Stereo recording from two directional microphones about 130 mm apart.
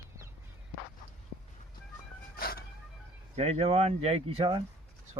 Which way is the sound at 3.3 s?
50° right (ahead or behind).